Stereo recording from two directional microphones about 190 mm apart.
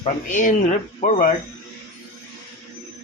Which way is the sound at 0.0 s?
40° left (ahead or behind).